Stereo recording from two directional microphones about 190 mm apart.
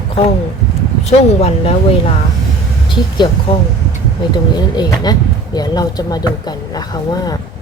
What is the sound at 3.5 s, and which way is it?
Speech, 25° left (ahead or behind).